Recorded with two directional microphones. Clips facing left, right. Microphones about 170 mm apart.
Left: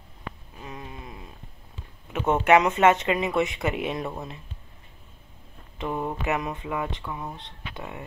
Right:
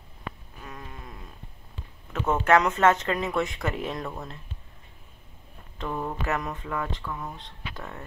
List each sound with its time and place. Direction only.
0.6 s a sound: 15° left (ahead or behind)
2.1 s speech: 15° left (ahead or behind)
5.8 s speech: 10° left (ahead or behind)